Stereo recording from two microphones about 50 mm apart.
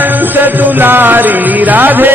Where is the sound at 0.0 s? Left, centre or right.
Right.